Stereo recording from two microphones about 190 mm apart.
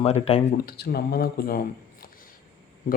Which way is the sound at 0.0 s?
30° left (ahead or behind).